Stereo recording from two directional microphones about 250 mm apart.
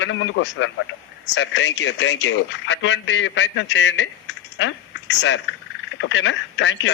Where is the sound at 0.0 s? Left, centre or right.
Left.